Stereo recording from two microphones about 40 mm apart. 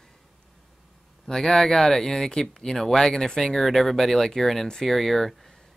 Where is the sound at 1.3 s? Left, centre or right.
Centre.